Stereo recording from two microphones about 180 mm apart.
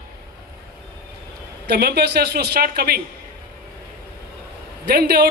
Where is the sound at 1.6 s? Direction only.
65° right (ahead or behind).